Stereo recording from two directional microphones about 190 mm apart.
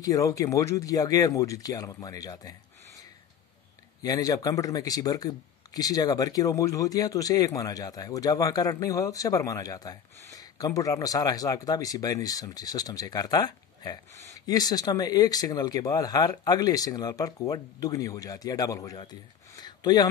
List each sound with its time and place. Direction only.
0.0 s speech: 20° left (ahead or behind)
4.0 s speech: 20° left (ahead or behind)